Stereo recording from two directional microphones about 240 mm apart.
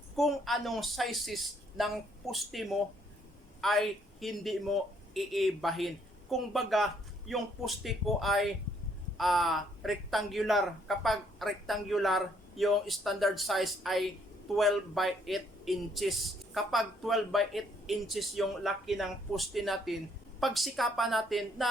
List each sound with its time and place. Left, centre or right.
0.2 s a man's voice: centre